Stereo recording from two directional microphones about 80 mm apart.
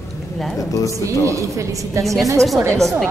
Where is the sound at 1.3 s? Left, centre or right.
Right.